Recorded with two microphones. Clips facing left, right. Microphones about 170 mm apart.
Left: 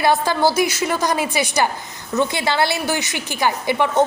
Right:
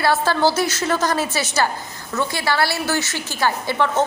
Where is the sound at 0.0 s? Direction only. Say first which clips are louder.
Left 1 dB; 15° left (ahead or behind).